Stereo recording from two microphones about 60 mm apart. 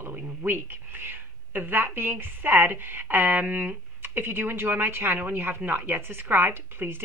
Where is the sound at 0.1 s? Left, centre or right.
Right.